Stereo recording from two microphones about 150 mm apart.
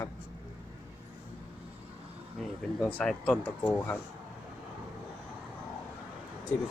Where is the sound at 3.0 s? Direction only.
5° left (ahead or behind).